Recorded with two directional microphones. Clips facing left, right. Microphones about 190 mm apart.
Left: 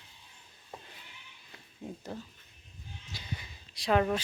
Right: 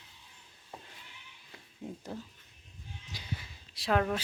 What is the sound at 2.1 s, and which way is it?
Speech, 5° right (ahead or behind).